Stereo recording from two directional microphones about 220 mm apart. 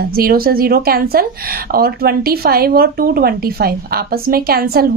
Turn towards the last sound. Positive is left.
turn(degrees=-45)  # may be behind; listen again after turning